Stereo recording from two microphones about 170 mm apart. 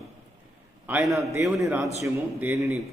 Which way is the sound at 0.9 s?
10° right (ahead or behind).